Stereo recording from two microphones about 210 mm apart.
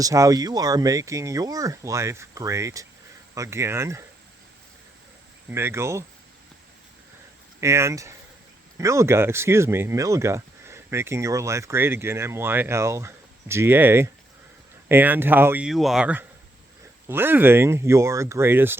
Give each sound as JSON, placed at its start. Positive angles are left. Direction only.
{"t": 0.0, "sound": "speech", "side_deg": -15}
{"t": 5.5, "sound": "speech", "side_deg": -10}
{"t": 7.6, "sound": "speech", "side_deg": -15}